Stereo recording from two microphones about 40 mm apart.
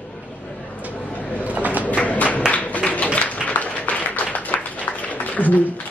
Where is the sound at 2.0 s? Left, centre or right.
Left.